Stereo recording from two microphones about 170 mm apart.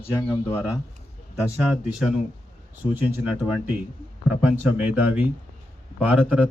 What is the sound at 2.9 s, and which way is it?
A man's voice, 10° right (ahead or behind).